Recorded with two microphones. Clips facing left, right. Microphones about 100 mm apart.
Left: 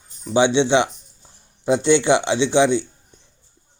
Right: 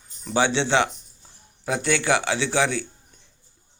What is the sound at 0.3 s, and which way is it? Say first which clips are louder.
Speech: left 5 dB; 20° left (ahead or behind).